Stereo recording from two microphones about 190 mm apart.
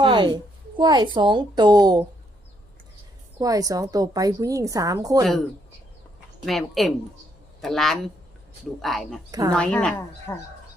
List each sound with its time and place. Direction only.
0.0 s a woman's voice: 25° right (ahead or behind)
3.3 s a woman's voice: 20° right (ahead or behind)
6.4 s a woman's voice: centre (ahead or behind)